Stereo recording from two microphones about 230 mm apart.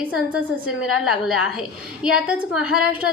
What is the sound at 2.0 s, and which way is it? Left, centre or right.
A woman's voice, centre.